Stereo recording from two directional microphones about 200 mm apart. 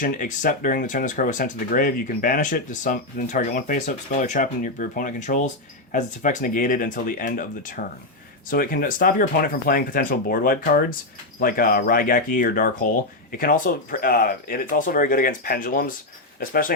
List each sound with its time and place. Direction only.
0.0 s speech: 40° left (ahead or behind)